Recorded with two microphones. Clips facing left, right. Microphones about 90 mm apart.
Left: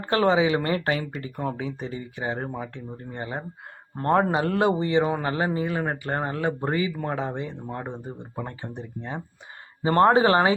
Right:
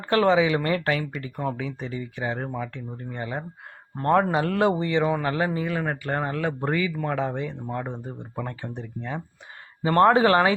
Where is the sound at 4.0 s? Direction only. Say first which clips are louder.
Right 1 dB; 25° left (ahead or behind).